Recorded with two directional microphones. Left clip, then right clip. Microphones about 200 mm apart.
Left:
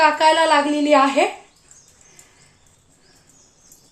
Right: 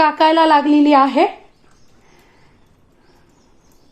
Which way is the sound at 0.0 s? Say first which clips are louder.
Right 2 dB; 45° right (ahead or behind).